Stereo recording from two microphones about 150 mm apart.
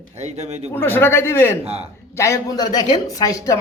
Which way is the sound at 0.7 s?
15° left (ahead or behind).